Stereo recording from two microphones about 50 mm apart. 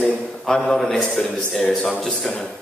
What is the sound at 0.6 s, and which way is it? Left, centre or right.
A man's voice, centre.